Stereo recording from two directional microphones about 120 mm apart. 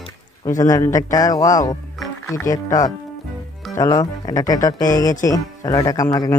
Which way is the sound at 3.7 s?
30° left (ahead or behind).